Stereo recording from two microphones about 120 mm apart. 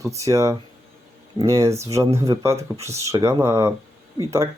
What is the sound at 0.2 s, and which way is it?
Speech, 25° right (ahead or behind).